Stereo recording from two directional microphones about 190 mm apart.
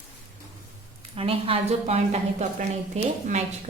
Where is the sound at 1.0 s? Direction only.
30° right (ahead or behind).